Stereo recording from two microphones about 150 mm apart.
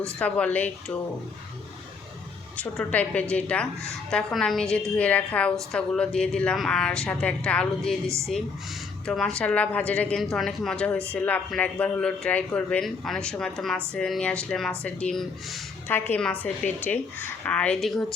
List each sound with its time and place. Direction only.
0.2 s speech: 10° left (ahead or behind)
2.6 s speech: 10° left (ahead or behind)
8.0 s a woman's voice: 20° right (ahead or behind)
9.0 s speech: 5° left (ahead or behind)
15.9 s speech: 15° left (ahead or behind)